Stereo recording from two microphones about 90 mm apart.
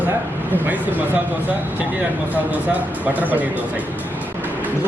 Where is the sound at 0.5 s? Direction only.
20° right (ahead or behind).